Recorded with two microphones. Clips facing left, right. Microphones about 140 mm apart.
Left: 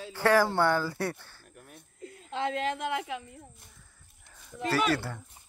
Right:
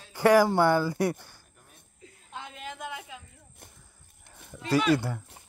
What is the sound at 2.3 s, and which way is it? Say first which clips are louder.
Speech: left 11 dB; 90° left.